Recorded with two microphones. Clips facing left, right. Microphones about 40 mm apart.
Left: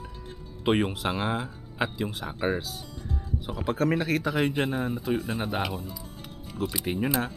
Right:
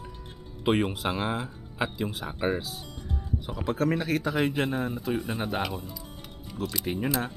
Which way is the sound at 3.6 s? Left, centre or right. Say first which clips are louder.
Left 1 dB; centre.